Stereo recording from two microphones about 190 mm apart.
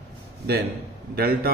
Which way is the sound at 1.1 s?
55° right (ahead or behind).